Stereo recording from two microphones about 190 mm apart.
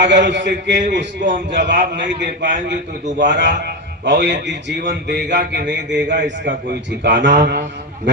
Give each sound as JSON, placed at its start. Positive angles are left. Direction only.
{"t": 0.1, "sound": "a man's voice", "side_deg": -65}